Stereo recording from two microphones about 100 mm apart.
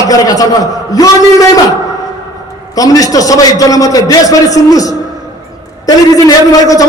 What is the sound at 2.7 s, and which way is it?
A man's voice, 35° left (ahead or behind).